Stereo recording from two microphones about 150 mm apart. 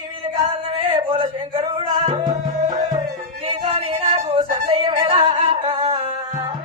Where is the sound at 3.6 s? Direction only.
45° right (ahead or behind).